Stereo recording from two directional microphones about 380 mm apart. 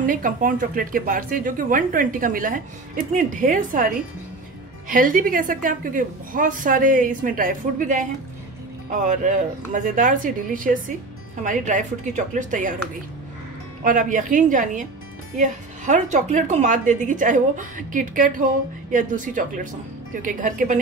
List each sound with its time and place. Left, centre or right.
0.0 s a woman's voice: right
13.8 s a woman's voice: right